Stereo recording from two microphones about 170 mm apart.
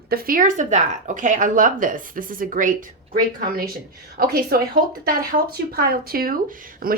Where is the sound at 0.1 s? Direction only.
60° right (ahead or behind).